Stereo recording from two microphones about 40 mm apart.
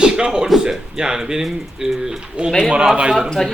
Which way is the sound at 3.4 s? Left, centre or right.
Centre.